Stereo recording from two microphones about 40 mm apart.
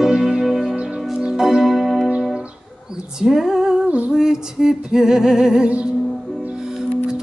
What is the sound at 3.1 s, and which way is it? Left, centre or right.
Female singing, centre.